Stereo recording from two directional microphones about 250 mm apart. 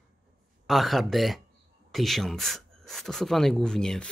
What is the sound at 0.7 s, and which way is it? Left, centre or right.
Speech, centre.